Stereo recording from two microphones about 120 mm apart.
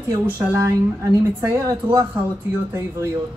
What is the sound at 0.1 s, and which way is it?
Speech, 25° right (ahead or behind).